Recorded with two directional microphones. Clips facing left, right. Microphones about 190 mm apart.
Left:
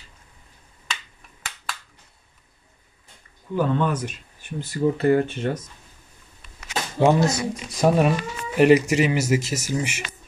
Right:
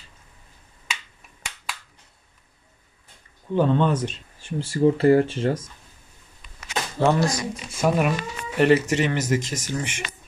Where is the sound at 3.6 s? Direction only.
25° right (ahead or behind).